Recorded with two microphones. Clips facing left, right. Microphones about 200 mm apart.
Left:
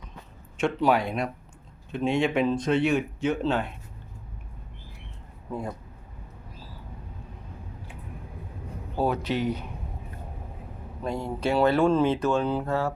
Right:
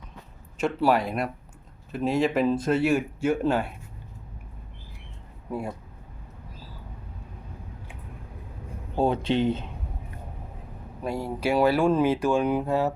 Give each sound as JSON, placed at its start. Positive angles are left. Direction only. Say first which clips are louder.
{"t": 0.6, "sound": "speech", "louder": "even", "side_deg": 0}
{"t": 5.5, "sound": "speech", "louder": "right 1 dB", "side_deg": -10}
{"t": 9.0, "sound": "speech", "louder": "right 3 dB", "side_deg": -25}
{"t": 11.0, "sound": "speech", "louder": "right 1 dB", "side_deg": -5}